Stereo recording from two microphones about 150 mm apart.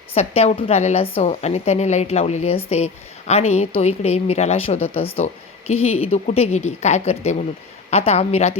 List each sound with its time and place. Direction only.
0.1 s speech: 45° left (ahead or behind)